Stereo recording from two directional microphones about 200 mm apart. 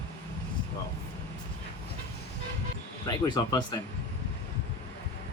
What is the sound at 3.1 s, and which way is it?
Speech, 20° left (ahead or behind).